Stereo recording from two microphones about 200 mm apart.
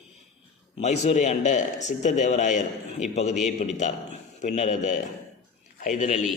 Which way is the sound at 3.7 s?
35° left (ahead or behind).